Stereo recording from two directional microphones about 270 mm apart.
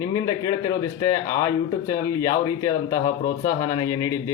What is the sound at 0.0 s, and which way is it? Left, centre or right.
A man's voice, centre.